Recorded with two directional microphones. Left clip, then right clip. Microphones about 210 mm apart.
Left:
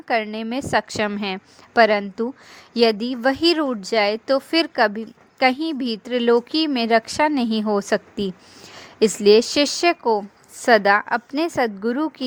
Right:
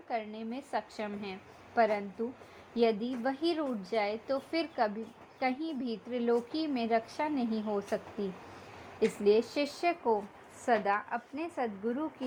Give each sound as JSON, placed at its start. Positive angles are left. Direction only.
{"t": 0.1, "sound": "speech", "side_deg": 35}